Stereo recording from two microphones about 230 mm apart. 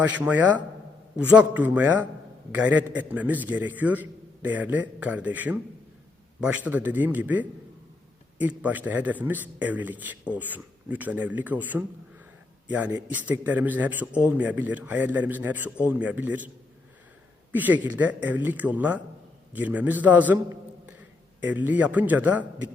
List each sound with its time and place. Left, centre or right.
0.0 s a man's voice: centre
17.5 s a man's voice: centre
21.4 s a man's voice: centre